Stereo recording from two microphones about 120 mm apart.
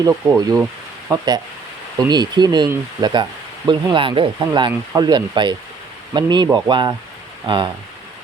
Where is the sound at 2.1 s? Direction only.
35° right (ahead or behind).